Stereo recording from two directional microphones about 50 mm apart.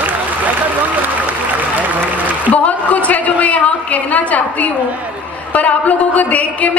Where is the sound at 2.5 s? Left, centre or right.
Left.